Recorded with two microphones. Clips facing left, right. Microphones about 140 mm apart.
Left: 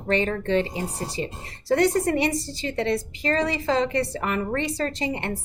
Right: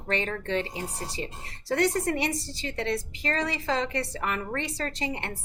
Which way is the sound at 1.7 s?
25° left (ahead or behind).